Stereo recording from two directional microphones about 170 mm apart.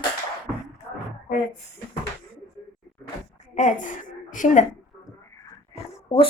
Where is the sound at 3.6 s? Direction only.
45° left (ahead or behind).